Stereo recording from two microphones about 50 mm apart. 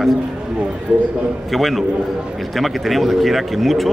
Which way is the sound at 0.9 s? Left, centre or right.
Right.